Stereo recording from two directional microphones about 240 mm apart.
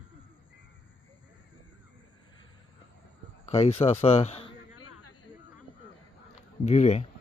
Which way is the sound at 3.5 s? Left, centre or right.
Left.